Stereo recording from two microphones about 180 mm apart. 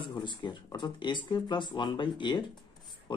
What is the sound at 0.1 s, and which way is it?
Speech, 25° left (ahead or behind).